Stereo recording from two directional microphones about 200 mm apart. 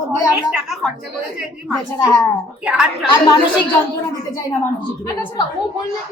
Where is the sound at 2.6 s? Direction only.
5° right (ahead or behind).